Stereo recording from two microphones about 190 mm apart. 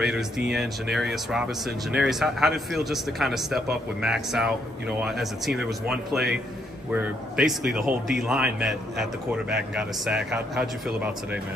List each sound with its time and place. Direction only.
0.5 s speech: centre (ahead or behind)